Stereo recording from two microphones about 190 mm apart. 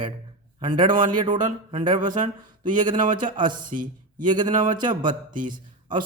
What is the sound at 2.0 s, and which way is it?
Speech, 40° right (ahead or behind).